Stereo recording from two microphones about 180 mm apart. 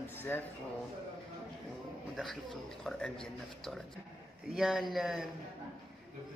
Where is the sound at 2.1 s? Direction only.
Centre (ahead or behind).